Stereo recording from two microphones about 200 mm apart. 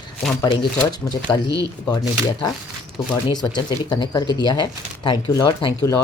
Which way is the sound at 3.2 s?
20° left (ahead or behind).